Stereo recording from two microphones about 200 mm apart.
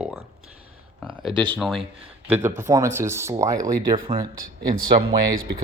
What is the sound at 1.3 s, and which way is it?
Speech, 25° right (ahead or behind).